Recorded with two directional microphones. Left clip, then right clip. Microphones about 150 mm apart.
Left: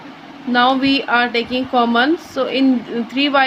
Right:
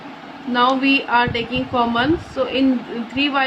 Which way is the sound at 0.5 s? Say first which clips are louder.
Left 2 dB; 55° left (ahead or behind).